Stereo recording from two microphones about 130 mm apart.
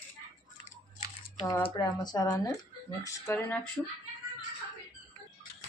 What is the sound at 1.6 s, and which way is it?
Speech, 35° left (ahead or behind).